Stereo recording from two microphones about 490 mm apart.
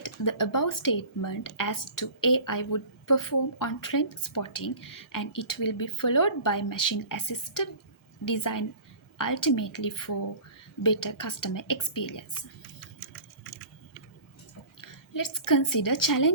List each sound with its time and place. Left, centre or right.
0.0 s speech: left
14.8 s a woman's voice: left